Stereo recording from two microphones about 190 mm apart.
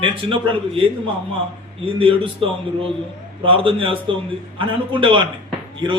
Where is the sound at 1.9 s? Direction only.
30° right (ahead or behind).